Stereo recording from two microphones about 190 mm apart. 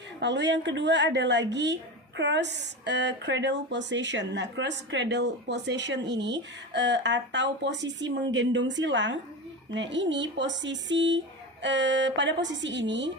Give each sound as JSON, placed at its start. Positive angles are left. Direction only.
{"t": 0.2, "sound": "a woman's voice", "side_deg": -70}